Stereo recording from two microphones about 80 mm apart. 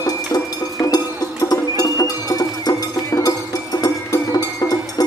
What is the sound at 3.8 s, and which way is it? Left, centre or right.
Music, left.